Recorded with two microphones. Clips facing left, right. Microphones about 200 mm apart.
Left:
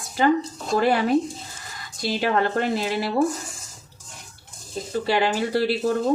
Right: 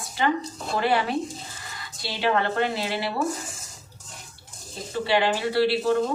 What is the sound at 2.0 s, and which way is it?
Speech, 45° left (ahead or behind).